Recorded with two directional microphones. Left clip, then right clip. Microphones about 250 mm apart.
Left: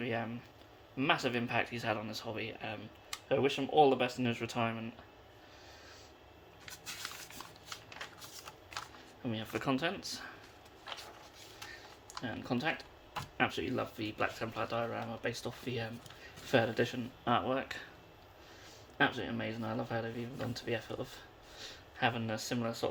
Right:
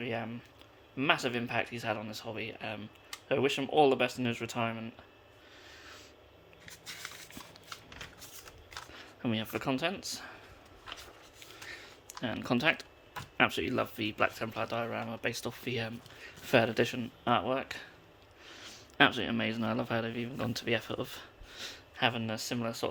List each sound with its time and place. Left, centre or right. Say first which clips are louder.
0.0 s speech: right 1 dB; centre
9.0 s speech: right 10 dB; right
12.2 s speech: right 6 dB; right
18.4 s speech: right 7 dB; right